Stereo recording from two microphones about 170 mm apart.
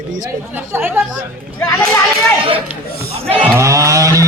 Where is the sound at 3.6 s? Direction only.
20° right (ahead or behind).